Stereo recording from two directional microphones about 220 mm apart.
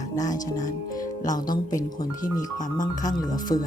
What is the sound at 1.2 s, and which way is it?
Speech, 35° left (ahead or behind).